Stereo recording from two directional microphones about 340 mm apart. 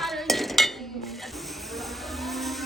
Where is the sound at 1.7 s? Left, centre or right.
Centre.